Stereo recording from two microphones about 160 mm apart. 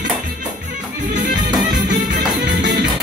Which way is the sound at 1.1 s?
55° right (ahead or behind).